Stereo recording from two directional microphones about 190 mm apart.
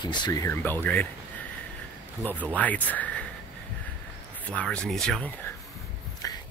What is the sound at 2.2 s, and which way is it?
Speech, 10° left (ahead or behind).